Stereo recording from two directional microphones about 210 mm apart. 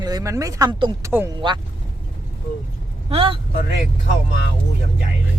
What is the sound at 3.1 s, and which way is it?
Speech, 25° right (ahead or behind).